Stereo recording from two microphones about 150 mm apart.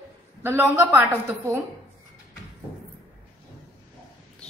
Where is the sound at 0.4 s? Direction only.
15° right (ahead or behind).